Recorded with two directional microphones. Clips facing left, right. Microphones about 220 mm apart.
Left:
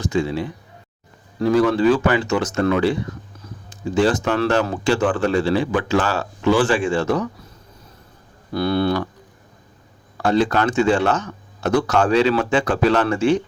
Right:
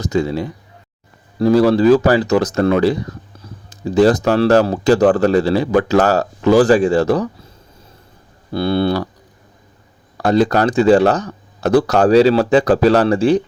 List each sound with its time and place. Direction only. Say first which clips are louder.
0.0 s speech: right 3 dB; 40° right (ahead or behind)
8.5 s speech: right 3 dB; 30° right (ahead or behind)
10.2 s speech: right 4 dB; 35° right (ahead or behind)